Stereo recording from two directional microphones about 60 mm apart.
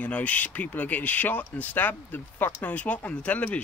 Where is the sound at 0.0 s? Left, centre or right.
Left.